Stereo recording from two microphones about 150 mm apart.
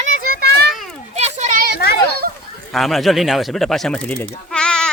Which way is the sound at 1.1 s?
45° right (ahead or behind).